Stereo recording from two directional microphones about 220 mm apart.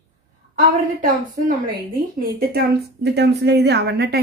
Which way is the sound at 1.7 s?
40° right (ahead or behind).